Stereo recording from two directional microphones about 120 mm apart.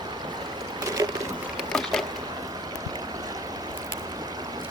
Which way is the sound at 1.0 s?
30° right (ahead or behind).